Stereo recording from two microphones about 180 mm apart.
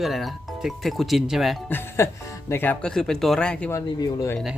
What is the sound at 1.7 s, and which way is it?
Speech, 15° left (ahead or behind).